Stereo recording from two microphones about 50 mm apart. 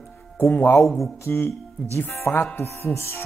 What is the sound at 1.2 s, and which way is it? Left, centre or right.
Speech, left.